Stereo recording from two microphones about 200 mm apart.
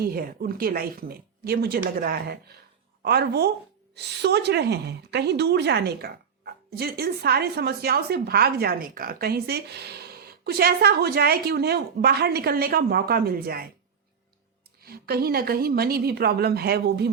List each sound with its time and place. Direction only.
0.0 s a woman's voice: 50° right (ahead or behind)
14.8 s a woman's voice: 50° right (ahead or behind)